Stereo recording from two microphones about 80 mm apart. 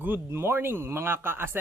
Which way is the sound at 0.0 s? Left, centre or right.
Right.